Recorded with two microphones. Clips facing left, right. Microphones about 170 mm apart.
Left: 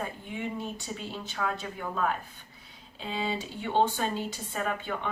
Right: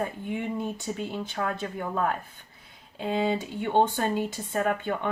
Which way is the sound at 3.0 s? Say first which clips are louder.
Right 6 dB; 55° right (ahead or behind).